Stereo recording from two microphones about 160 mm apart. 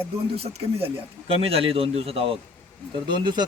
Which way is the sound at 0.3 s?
40° right (ahead or behind).